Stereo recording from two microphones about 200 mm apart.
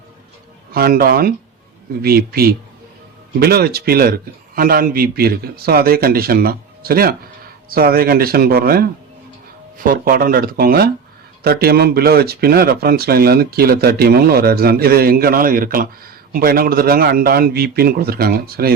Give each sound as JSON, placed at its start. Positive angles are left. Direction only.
{"t": 0.7, "sound": "speech", "side_deg": -50}